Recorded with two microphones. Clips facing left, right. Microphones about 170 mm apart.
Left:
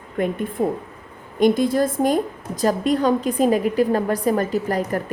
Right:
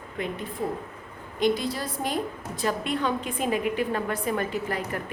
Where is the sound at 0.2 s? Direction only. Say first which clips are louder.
Left 9 dB; 50° left (ahead or behind).